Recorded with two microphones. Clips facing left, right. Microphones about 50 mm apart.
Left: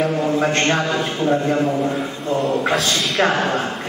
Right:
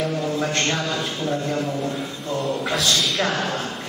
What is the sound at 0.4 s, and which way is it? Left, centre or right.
A man's voice, left.